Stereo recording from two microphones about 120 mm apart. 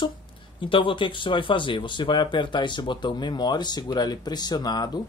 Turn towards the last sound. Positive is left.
turn(degrees=35)  # may be behind; listen again after turning